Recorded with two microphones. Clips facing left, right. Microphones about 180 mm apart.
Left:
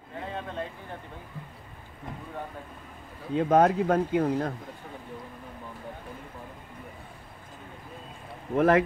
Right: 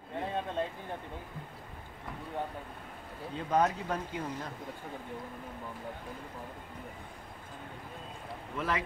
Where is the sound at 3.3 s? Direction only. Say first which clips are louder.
Left 8 dB; 50° left (ahead or behind).